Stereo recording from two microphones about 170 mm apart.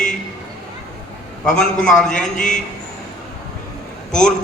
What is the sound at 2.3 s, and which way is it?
Speech, 45° left (ahead or behind).